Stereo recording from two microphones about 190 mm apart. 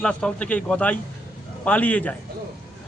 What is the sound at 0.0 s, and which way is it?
A man's voice, 5° left (ahead or behind).